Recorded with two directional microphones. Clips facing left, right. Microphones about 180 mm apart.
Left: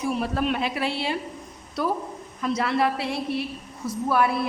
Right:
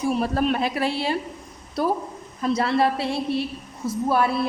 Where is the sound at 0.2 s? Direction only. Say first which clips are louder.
Right 3 dB; 40° right (ahead or behind).